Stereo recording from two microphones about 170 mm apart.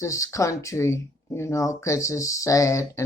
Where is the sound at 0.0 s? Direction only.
20° left (ahead or behind).